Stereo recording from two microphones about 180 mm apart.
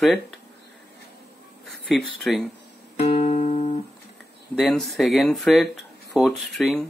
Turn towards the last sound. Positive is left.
turn(degrees=0)  # may be behind; listen again after turning